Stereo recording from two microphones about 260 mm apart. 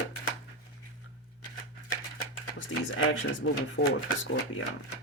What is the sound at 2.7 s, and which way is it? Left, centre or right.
Speech, left.